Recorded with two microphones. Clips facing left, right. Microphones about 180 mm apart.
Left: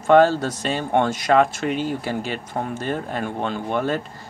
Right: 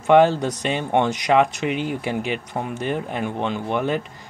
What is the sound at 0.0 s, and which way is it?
Speech, 15° right (ahead or behind).